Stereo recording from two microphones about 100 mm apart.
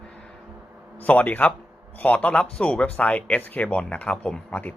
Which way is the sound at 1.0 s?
15° left (ahead or behind).